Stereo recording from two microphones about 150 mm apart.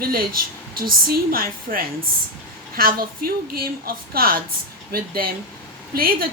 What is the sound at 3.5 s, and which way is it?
Speech, 85° right.